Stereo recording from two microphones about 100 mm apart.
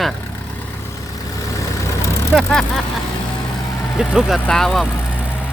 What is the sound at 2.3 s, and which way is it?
Speech, 5° left (ahead or behind).